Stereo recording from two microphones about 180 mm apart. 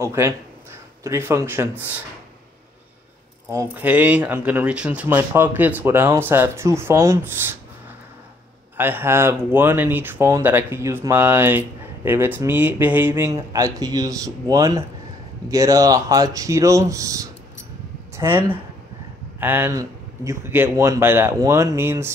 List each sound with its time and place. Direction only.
0.0 s speech: 15° right (ahead or behind)
3.5 s speech: 10° right (ahead or behind)
8.7 s speech: 10° right (ahead or behind)